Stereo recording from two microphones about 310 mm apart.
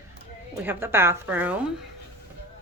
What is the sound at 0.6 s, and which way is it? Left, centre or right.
Speech, centre.